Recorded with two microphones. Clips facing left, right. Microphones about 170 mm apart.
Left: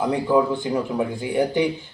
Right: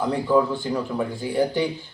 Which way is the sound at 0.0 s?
15° left (ahead or behind).